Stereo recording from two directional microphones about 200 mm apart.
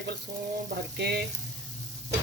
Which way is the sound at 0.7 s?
55° right (ahead or behind).